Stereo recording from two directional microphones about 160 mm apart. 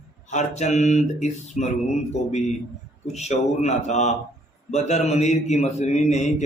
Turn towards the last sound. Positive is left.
turn(degrees=45)  # may be behind; listen again after turning